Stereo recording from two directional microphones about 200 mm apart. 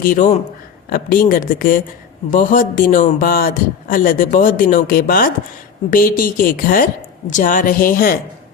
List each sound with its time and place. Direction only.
0.0 s a man's voice: 40° left (ahead or behind)